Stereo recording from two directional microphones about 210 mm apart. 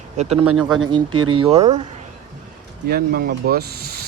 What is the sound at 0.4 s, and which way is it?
Speech, 90° right.